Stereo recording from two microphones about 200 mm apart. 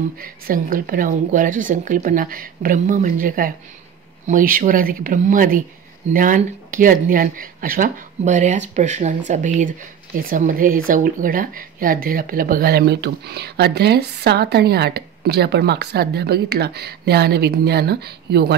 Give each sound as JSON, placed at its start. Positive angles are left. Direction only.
{"t": 0.2, "sound": "speech", "side_deg": -45}